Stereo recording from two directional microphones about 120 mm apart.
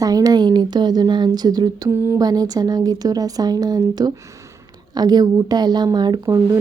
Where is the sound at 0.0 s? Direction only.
30° right (ahead or behind).